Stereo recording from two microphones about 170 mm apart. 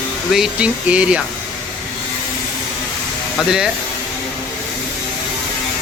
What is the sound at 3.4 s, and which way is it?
Speech, 5° right (ahead or behind).